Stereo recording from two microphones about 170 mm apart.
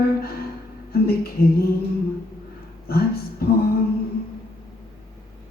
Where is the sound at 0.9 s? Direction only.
65° left (ahead or behind).